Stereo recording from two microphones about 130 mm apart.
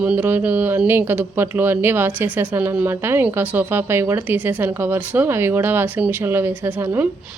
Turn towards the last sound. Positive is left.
turn(degrees=-15)  # may be behind; listen again after turning